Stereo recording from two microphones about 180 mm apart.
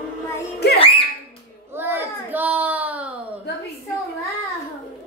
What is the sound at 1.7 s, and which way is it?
Baby cry, 10° right (ahead or behind).